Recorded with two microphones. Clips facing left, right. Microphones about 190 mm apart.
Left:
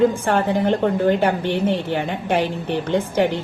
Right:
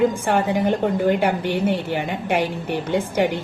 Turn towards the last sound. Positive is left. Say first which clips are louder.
# left 1 dB
turn(degrees=-10)  # may be behind; listen again after turning